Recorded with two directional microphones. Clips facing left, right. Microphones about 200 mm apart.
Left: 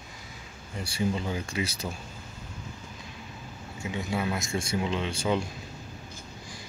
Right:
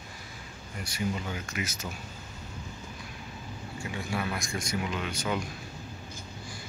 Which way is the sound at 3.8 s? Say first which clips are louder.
Left 3 dB; 20° left (ahead or behind).